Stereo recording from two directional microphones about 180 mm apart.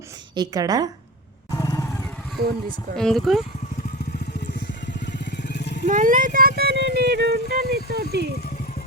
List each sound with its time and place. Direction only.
0.3 s a woman's voice: 20° right (ahead or behind)
1.5 s vehicle: 15° left (ahead or behind)
2.4 s speech: 60° right (ahead or behind)
2.9 s speech: 5° left (ahead or behind)
5.4 s vehicle: 70° left (ahead or behind)
5.8 s speech: 45° right (ahead or behind)
6.6 s speech: 60° right (ahead or behind)